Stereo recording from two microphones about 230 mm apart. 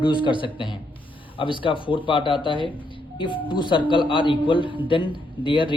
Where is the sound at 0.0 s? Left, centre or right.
Left.